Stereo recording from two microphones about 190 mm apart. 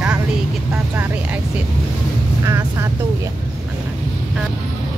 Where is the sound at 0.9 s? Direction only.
10° right (ahead or behind).